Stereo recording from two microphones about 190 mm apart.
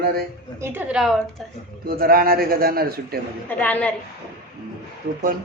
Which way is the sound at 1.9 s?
50° right (ahead or behind).